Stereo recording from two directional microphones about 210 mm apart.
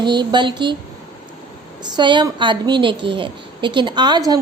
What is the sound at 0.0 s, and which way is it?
Speech, 20° right (ahead or behind).